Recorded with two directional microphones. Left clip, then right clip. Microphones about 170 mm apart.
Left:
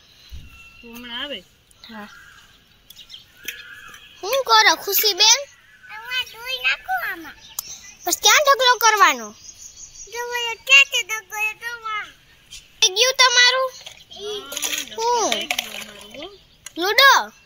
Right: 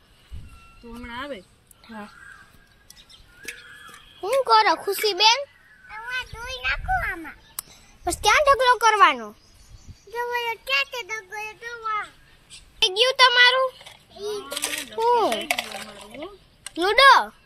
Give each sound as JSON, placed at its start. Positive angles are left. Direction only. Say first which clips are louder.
{"t": 0.9, "sound": "a child's voice", "louder": "left 4 dB", "side_deg": 5}
{"t": 4.2, "sound": "a sound", "louder": "left 2 dB", "side_deg": 0}
{"t": 10.1, "sound": "a child's voice", "louder": "even", "side_deg": 0}
{"t": 10.7, "sound": "child singing", "louder": "left 12 dB", "side_deg": -35}
{"t": 11.1, "sound": "child singing", "louder": "left 7 dB", "side_deg": -50}
{"t": 11.6, "sound": "child singing", "louder": "left 1 dB", "side_deg": -35}
{"t": 12.7, "sound": "a child's voice", "louder": "left 3 dB", "side_deg": 5}
{"t": 14.2, "sound": "a child's voice", "louder": "left 1 dB", "side_deg": -10}
{"t": 15.3, "sound": "a sound", "louder": "left 2 dB", "side_deg": -10}
{"t": 16.7, "sound": "a child's voice", "louder": "left 1 dB", "side_deg": 0}